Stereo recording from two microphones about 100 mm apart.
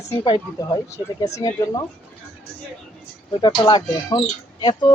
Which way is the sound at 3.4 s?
45° left (ahead or behind).